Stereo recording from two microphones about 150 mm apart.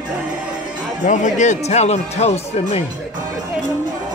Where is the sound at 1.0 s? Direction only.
55° left (ahead or behind).